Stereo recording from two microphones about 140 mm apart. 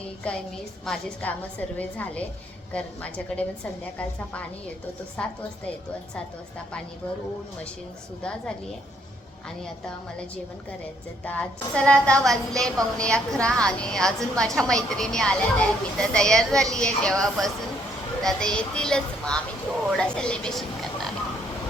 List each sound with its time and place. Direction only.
0.2 s a woman's voice: 10° left (ahead or behind)
5.1 s a woman's voice: 5° left (ahead or behind)
8.2 s a woman's voice: 5° left (ahead or behind)
11.3 s a woman's voice: 10° left (ahead or behind)